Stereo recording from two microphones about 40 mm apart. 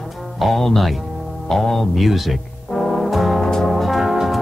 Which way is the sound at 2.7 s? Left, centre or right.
Centre.